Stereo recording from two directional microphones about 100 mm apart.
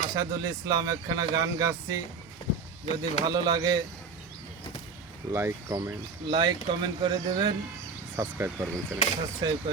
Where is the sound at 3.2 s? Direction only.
45° right (ahead or behind).